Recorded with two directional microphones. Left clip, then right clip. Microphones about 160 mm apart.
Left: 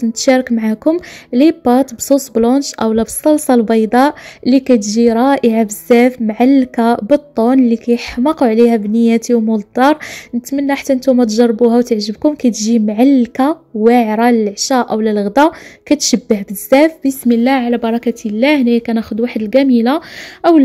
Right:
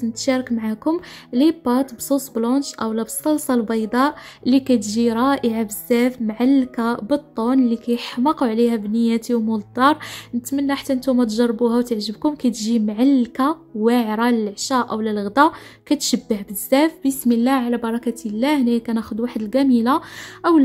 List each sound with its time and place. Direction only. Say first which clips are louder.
0.0 s a woman's voice: left 9 dB; 25° left (ahead or behind)